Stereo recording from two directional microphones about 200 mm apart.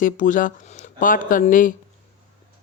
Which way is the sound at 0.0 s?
40° left (ahead or behind).